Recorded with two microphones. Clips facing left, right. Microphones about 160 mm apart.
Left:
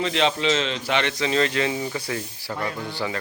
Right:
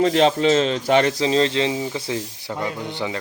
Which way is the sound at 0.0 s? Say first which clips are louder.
Right 6 dB; 40° right (ahead or behind).